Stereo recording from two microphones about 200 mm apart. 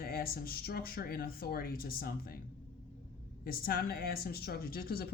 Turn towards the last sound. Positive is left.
turn(degrees=50)  # may be behind; listen again after turning